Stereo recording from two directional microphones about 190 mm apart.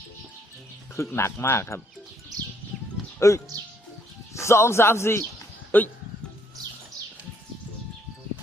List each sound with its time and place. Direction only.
0.9 s a man's voice: 15° left (ahead or behind)
2.7 s music: centre (ahead or behind)
3.2 s a man's voice: 15° left (ahead or behind)